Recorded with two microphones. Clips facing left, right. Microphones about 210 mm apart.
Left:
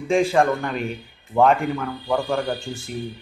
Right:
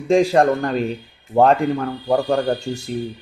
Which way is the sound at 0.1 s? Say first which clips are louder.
Right 4 dB; 35° right (ahead or behind).